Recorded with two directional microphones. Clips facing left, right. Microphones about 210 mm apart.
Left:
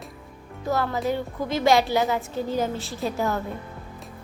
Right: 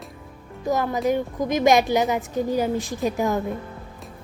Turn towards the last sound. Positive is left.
turn(degrees=-15)  # may be behind; listen again after turning